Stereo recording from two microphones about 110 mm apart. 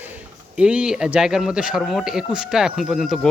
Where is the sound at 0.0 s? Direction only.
15° right (ahead or behind).